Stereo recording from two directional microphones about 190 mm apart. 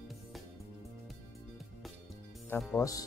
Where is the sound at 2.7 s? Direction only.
15° left (ahead or behind).